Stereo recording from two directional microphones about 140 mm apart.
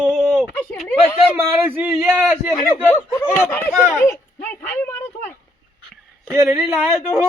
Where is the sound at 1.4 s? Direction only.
15° right (ahead or behind).